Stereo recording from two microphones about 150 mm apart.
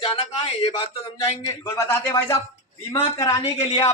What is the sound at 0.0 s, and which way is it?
Speech, 35° left (ahead or behind).